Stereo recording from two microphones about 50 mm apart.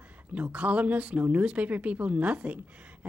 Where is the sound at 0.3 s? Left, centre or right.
Right.